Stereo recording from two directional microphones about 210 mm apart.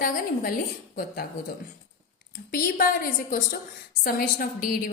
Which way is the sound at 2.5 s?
45° left (ahead or behind).